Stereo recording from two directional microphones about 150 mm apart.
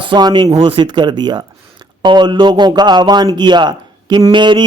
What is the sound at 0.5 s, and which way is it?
Speech, 35° right (ahead or behind).